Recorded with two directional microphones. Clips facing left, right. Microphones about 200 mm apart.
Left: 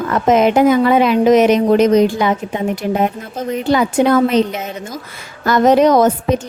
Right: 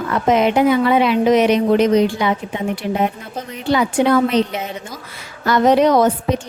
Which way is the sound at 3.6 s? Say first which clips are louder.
Left 2 dB; 45° left (ahead or behind).